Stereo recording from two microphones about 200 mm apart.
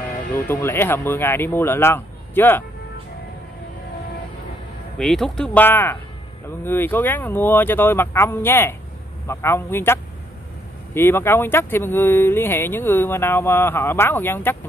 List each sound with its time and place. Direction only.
0.3 s speech: 10° left (ahead or behind)
4.9 s speech: 5° left (ahead or behind)
11.0 s speech: 10° left (ahead or behind)